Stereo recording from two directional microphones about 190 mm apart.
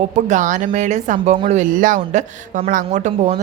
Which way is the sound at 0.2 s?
40° right (ahead or behind).